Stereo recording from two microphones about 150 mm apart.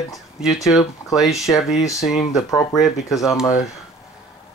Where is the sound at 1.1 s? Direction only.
Centre (ahead or behind).